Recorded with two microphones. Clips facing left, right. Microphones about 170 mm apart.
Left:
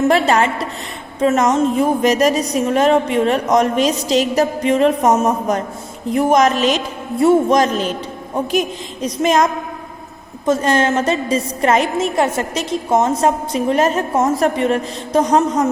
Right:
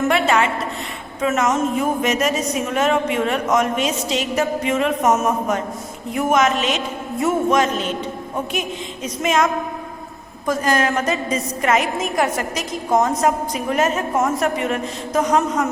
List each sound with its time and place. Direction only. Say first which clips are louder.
0.1 s a woman's voice: left 3 dB; 35° left (ahead or behind)
9.0 s a woman's voice: left 4 dB; 35° left (ahead or behind)